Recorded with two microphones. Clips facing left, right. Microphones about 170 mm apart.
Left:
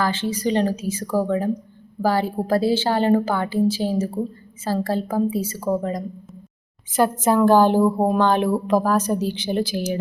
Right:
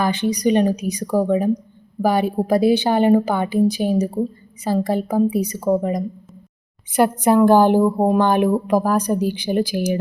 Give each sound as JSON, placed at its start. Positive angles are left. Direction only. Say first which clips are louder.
{"t": 0.0, "sound": "a woman's voice", "louder": "right 4 dB", "side_deg": -15}